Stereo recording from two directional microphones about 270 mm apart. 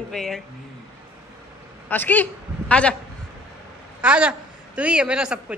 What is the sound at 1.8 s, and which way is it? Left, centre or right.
A man's voice, centre.